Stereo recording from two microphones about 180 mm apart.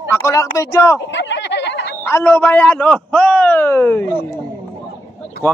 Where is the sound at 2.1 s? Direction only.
10° left (ahead or behind).